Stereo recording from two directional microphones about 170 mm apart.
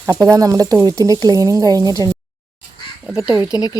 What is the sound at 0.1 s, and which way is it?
Speech, 20° right (ahead or behind).